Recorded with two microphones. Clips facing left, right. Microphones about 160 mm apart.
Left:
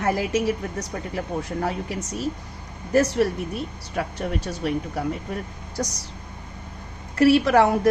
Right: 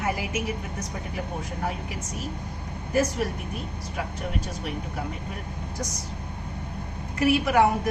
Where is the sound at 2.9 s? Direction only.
75° left (ahead or behind).